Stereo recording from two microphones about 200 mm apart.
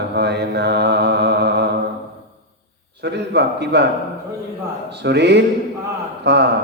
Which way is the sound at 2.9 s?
55° right (ahead or behind).